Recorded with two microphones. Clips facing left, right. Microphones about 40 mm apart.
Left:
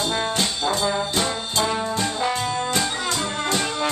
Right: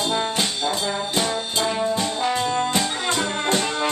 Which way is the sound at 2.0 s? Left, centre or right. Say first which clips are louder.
Even; centre.